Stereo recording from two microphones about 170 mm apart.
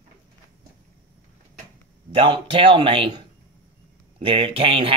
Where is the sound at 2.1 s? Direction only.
30° right (ahead or behind).